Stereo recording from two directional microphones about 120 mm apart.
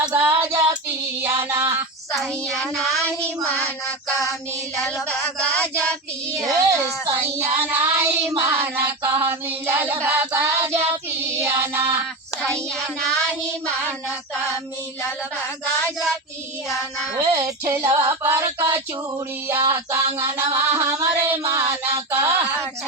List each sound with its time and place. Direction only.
0.1 s child singing: 15° right (ahead or behind)
2.1 s child singing: centre (ahead or behind)
3.2 s child singing: 10° left (ahead or behind)
5.5 s child singing: 10° left (ahead or behind)
6.6 s speech: 25° right (ahead or behind)
8.3 s music: 20° right (ahead or behind)
17.2 s music: 30° right (ahead or behind)